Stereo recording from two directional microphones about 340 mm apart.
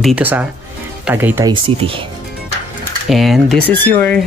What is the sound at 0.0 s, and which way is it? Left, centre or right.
Speech, centre.